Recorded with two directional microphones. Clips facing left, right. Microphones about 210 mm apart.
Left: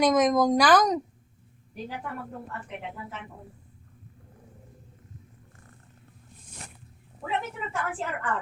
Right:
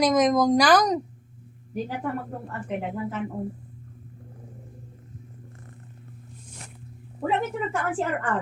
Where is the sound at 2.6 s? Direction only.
50° right (ahead or behind).